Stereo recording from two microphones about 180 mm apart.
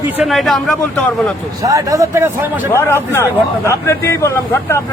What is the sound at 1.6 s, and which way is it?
Speech, 20° right (ahead or behind).